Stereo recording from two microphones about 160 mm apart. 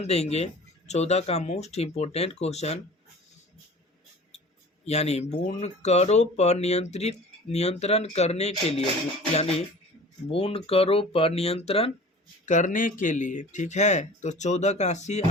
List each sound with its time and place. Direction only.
0.0 s speech: 40° left (ahead or behind)
4.9 s speech: 45° left (ahead or behind)
12.5 s speech: 50° left (ahead or behind)